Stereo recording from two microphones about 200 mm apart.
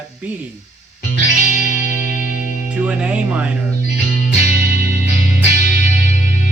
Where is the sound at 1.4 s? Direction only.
40° left (ahead or behind).